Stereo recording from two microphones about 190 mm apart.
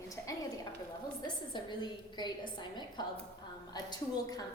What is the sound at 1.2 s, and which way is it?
A woman's voice, 25° left (ahead or behind).